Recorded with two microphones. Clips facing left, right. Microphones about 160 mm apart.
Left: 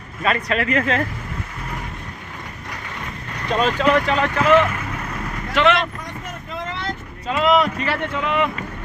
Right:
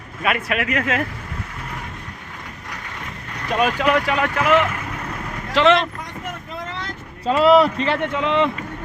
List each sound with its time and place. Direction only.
0.2 s speech: 10° right (ahead or behind)
3.6 s speech: 10° right (ahead or behind)
5.5 s speech: 30° right (ahead or behind)
7.3 s speech: 35° right (ahead or behind)
7.9 s speech: 20° right (ahead or behind)